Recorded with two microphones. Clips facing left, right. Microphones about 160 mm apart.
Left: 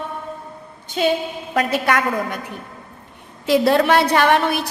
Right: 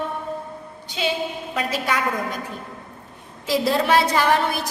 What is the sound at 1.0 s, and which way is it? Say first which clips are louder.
Speech: left 6 dB; 45° left (ahead or behind).